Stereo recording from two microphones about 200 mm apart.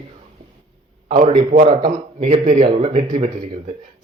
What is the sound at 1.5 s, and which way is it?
A man's voice, 35° right (ahead or behind).